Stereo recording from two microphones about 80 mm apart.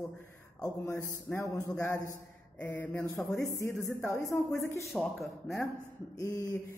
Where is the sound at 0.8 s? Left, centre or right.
Left.